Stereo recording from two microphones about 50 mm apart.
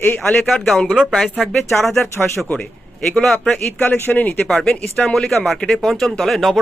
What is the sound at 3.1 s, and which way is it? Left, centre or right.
Speech, centre.